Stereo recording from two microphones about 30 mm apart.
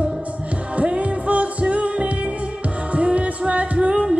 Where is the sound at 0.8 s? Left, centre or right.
Right.